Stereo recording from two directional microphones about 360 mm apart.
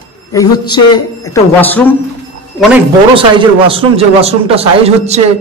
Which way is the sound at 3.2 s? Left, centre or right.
Centre.